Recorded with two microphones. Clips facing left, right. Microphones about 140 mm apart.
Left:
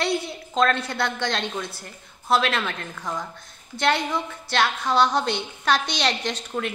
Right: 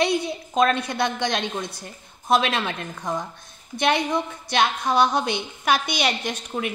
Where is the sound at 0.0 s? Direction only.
15° right (ahead or behind).